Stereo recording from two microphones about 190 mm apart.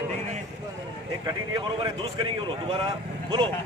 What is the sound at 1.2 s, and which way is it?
Speech, 25° right (ahead or behind).